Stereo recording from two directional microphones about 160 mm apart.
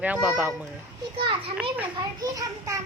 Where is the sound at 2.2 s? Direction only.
20° right (ahead or behind).